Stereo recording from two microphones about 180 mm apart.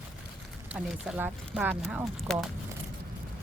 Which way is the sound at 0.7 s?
5° right (ahead or behind).